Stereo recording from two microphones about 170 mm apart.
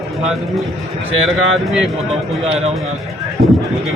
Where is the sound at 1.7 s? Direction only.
Centre (ahead or behind).